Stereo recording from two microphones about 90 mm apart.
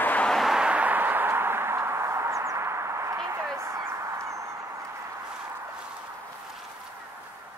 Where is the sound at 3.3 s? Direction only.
30° right (ahead or behind).